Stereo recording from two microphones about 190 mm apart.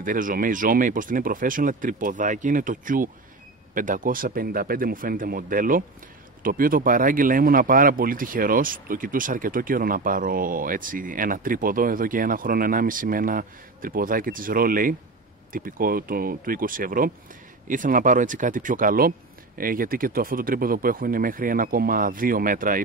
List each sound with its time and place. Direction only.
0.0 s speech: 45° right (ahead or behind)